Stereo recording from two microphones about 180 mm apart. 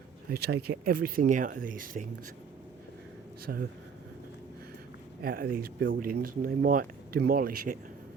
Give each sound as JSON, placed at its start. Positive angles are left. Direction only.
{"t": 0.3, "sound": "speech", "side_deg": -60}
{"t": 5.2, "sound": "speech", "side_deg": -55}